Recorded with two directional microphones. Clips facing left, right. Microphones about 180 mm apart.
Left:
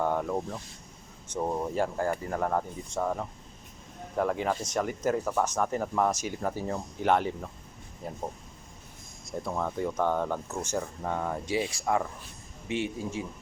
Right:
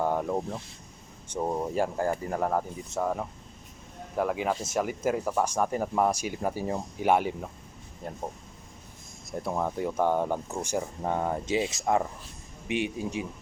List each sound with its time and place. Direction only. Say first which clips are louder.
0.0 s speech: right 1 dB; 15° right (ahead or behind)
8.0 s speech: even; 5° left (ahead or behind)
9.5 s speech: right 2 dB; 10° right (ahead or behind)
11.0 s speech: right 3 dB; 25° right (ahead or behind)